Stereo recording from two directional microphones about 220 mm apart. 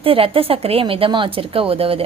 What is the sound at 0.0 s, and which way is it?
A woman's voice, 25° right (ahead or behind).